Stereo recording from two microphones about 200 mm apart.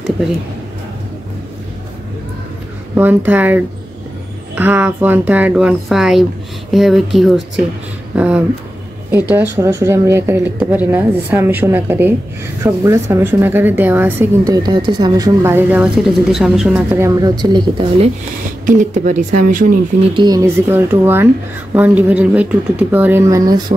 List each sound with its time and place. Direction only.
3.0 s a woman's voice: 10° right (ahead or behind); by 18.1 s 25° right (ahead or behind)
18.7 s speech: 40° right (ahead or behind)
20.2 s a woman's voice: 20° right (ahead or behind)